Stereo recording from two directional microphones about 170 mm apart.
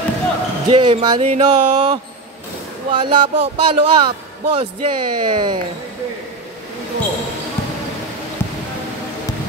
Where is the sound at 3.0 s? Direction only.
30° right (ahead or behind).